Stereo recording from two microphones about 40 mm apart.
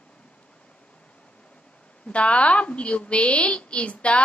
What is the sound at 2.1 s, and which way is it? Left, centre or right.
A woman's voice, left.